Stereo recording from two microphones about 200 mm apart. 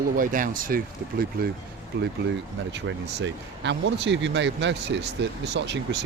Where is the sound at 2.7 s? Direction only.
65° right (ahead or behind).